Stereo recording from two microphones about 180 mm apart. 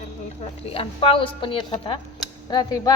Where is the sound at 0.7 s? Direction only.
30° left (ahead or behind).